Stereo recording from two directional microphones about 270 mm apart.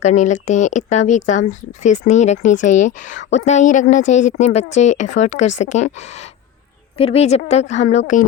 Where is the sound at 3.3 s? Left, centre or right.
Left.